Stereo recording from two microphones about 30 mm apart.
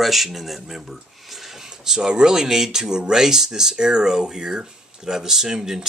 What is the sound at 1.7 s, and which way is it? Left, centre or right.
Speech, centre.